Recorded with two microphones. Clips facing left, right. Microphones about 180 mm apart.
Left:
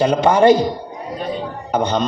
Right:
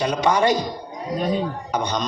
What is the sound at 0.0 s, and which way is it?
Speech, 50° left (ahead or behind).